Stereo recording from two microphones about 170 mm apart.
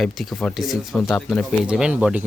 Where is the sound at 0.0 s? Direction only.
Centre (ahead or behind).